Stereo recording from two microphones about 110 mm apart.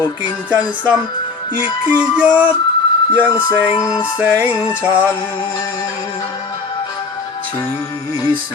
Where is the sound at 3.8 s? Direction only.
30° left (ahead or behind).